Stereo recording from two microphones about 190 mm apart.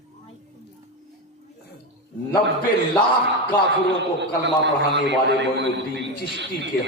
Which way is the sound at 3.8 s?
65° right (ahead or behind).